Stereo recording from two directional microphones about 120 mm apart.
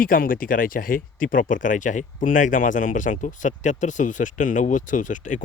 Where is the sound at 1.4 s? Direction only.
90° left.